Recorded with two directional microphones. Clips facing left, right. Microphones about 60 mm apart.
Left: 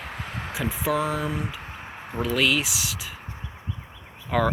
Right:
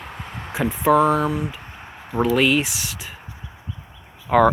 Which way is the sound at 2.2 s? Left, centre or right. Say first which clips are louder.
Right 5 dB; centre.